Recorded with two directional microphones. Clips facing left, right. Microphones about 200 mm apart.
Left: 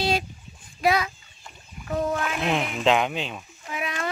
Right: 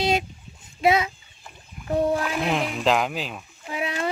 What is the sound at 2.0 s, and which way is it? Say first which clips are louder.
Music: right 3 dB; 30° right (ahead or behind).